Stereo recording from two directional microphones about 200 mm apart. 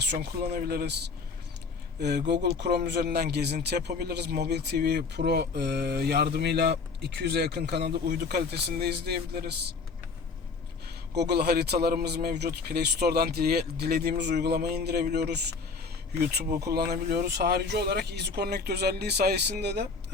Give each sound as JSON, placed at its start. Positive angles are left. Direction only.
{"t": 0.1, "sound": "a man's voice", "side_deg": -50}
{"t": 2.0, "sound": "speech", "side_deg": -55}
{"t": 10.8, "sound": "a man's voice", "side_deg": -55}